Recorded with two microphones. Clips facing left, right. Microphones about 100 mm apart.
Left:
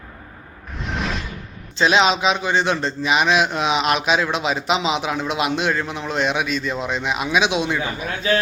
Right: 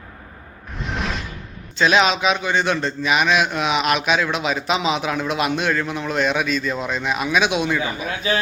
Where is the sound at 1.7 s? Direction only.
25° left (ahead or behind).